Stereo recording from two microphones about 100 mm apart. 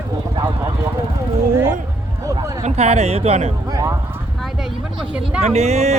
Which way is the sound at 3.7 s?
35° right (ahead or behind).